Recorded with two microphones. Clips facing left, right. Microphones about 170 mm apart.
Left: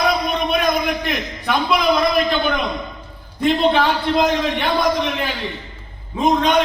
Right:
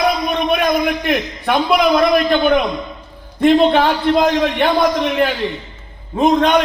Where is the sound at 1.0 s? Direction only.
55° right (ahead or behind).